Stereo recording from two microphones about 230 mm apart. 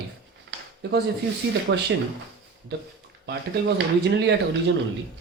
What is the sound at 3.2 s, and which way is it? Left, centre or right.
A man's voice, right.